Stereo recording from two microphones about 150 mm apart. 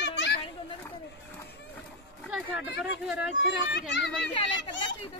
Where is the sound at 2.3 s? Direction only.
5° right (ahead or behind).